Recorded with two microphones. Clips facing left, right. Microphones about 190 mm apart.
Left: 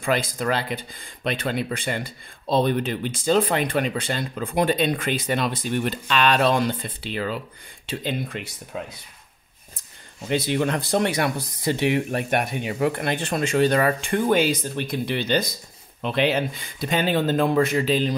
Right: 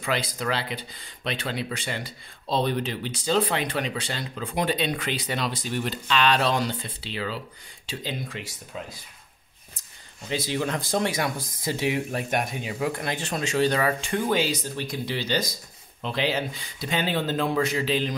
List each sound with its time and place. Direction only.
0.0 s speech: 50° left (ahead or behind)
10.2 s speech: 60° left (ahead or behind); by 18.1 s 45° left (ahead or behind)